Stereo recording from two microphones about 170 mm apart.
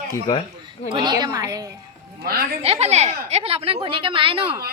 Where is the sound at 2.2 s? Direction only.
65° right (ahead or behind).